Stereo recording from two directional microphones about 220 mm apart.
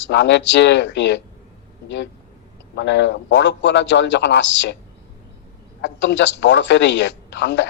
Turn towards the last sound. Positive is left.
turn(degrees=55)  # may be behind; listen again after turning